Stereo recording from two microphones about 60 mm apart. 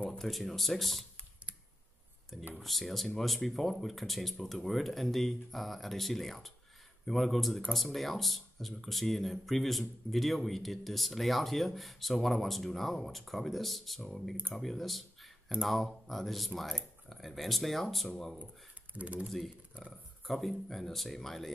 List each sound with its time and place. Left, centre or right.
0.2 s speech: centre
2.5 s speech: centre
18.9 s speech: right
19.2 s speech: centre